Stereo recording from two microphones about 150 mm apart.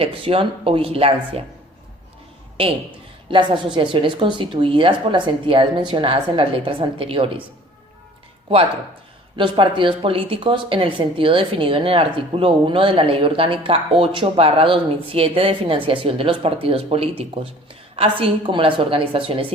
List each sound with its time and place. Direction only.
0.0 s speech: 40° right (ahead or behind)
3.2 s speech: 35° right (ahead or behind)
9.3 s speech: 35° right (ahead or behind)